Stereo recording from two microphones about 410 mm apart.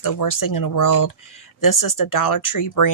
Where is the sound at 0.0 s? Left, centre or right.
Left.